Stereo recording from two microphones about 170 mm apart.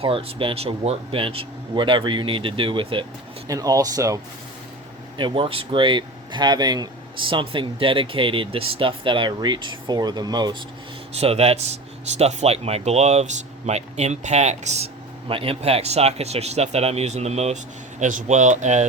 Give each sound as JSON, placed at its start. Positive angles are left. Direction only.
{"t": 0.0, "sound": "speech", "side_deg": -30}
{"t": 5.1, "sound": "speech", "side_deg": -30}
{"t": 11.1, "sound": "speech", "side_deg": -35}